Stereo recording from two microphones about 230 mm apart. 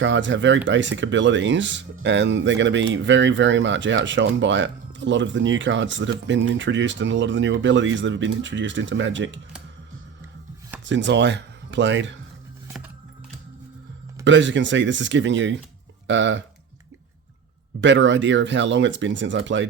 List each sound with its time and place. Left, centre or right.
0.0 s speech: right
10.8 s speech: right
14.3 s speech: right
17.7 s speech: right